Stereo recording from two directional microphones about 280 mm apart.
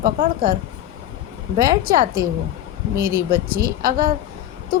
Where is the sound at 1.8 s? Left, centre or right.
Right.